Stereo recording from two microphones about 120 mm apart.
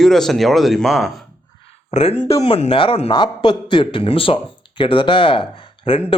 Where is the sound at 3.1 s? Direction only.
40° left (ahead or behind).